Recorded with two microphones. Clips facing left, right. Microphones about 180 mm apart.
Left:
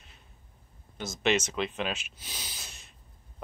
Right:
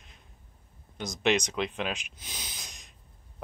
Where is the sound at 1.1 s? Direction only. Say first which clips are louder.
Right 1 dB; 15° right (ahead or behind).